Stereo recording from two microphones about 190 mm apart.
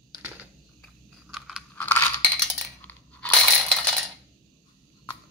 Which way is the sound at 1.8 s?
10° left (ahead or behind).